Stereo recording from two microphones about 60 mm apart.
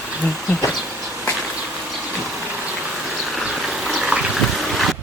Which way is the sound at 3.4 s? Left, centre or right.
Centre.